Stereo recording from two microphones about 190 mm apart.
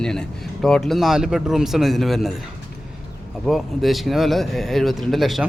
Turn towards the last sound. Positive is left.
turn(degrees=0)  # may be behind; listen again after turning